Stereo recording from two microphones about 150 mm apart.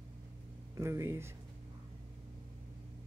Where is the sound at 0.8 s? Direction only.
20° right (ahead or behind).